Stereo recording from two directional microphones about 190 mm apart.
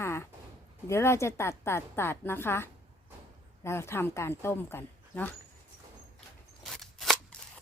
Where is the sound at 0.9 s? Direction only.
15° left (ahead or behind).